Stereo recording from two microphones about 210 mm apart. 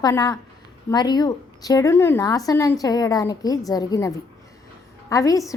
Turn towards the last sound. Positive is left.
turn(degrees=15)  # may be behind; listen again after turning